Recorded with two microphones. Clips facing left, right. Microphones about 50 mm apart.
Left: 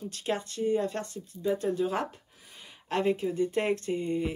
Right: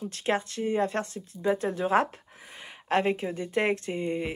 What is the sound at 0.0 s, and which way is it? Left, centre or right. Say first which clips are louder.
Speech: right 4 dB; right.